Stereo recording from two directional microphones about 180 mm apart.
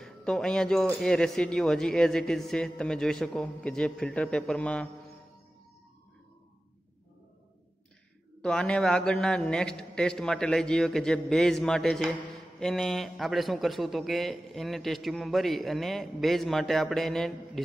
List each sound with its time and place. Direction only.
0.0 s speech: 5° left (ahead or behind)
8.4 s speech: 5° left (ahead or behind)